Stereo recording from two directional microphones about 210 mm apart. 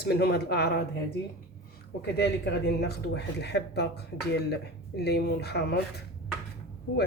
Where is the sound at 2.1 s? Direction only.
50° left (ahead or behind).